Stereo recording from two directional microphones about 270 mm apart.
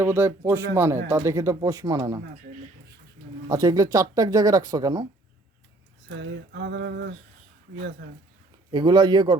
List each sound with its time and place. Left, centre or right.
0.0 s speech: centre
3.5 s speech: centre
6.1 s a sound: right
8.7 s speech: centre